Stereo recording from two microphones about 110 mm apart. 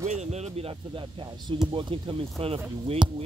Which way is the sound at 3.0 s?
45° right (ahead or behind).